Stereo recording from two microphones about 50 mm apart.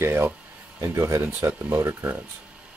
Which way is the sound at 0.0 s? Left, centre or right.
Right.